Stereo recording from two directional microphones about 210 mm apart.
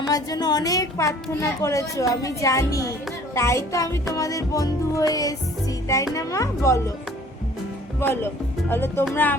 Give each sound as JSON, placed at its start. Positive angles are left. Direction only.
{"t": 0.1, "sound": "a child's voice", "side_deg": 20}
{"t": 7.9, "sound": "a child's voice", "side_deg": 10}